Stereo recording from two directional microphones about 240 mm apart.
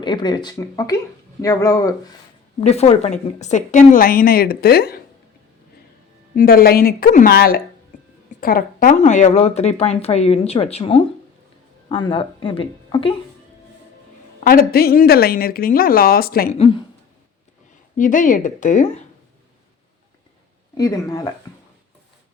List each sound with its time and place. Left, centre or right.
0.0 s speech: centre
2.6 s a woman's voice: left
6.3 s a woman's voice: left
14.4 s a woman's voice: left
17.9 s a woman's voice: left
20.7 s speech: centre